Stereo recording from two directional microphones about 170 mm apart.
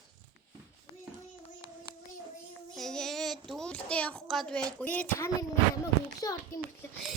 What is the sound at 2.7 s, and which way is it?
Child singing, centre (ahead or behind).